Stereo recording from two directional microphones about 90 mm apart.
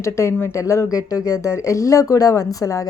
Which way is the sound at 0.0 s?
30° left (ahead or behind).